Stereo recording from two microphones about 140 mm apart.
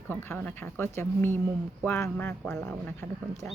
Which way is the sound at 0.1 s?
10° left (ahead or behind).